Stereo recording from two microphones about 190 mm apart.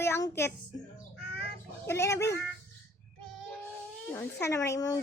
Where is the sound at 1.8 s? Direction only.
15° left (ahead or behind).